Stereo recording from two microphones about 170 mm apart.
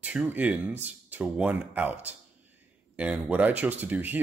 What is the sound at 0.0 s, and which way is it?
Speech, 10° right (ahead or behind).